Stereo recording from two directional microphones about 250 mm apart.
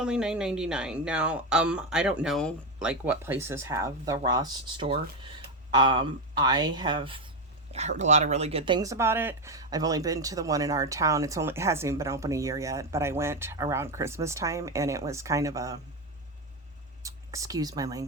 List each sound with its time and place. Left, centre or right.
0.0 s speech: centre
17.0 s speech: centre